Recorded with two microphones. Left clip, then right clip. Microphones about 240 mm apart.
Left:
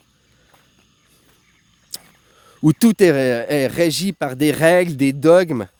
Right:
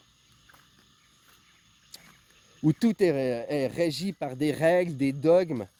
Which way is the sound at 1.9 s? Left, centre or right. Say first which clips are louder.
Left 14 dB; left.